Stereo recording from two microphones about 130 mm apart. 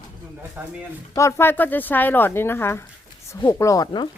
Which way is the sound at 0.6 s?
15° right (ahead or behind).